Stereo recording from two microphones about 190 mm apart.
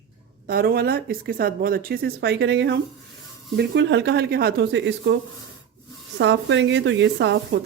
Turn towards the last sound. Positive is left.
turn(degrees=-70)  # may be behind; listen again after turning